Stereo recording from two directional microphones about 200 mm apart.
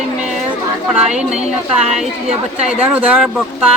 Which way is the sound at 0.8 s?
5° right (ahead or behind).